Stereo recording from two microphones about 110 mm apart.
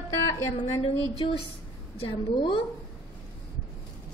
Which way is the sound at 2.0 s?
55° left (ahead or behind).